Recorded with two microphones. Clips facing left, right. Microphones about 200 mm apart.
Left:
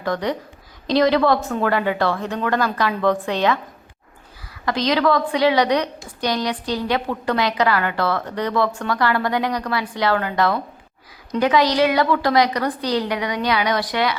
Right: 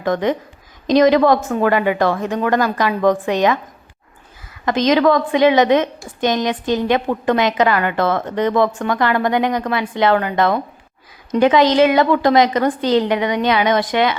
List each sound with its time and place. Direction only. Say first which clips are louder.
0.0 s a woman's voice: right 5 dB; 20° right (ahead or behind)
4.6 s a woman's voice: right 5 dB; 20° right (ahead or behind)